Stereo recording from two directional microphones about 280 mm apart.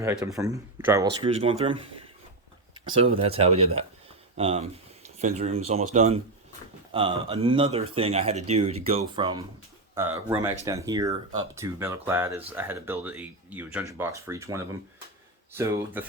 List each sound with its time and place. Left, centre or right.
0.0 s speech: centre
2.9 s speech: right